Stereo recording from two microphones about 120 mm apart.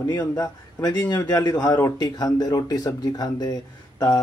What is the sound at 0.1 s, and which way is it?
Speech, 20° left (ahead or behind).